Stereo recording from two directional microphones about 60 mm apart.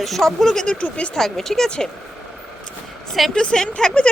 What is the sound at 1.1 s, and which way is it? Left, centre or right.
Speech, centre.